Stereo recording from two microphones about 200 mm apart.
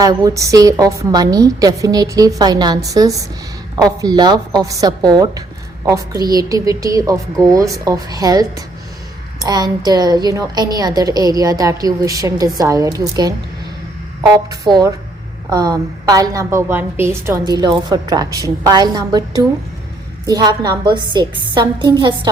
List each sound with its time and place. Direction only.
0.0 s a woman's voice: 15° right (ahead or behind)